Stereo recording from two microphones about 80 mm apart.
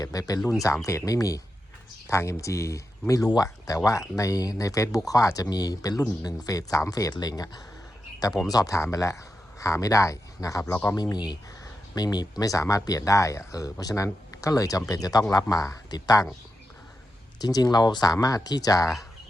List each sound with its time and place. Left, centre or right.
0.0 s speech: left
7.1 s speech: left
10.9 s speech: left
17.4 s speech: left